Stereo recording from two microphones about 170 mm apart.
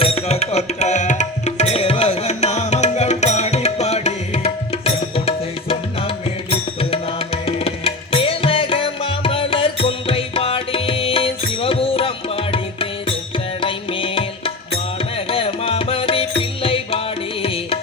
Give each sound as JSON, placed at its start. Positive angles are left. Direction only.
{"t": 0.0, "sound": "tabla", "side_deg": 35}
{"t": 6.5, "sound": "music", "side_deg": 35}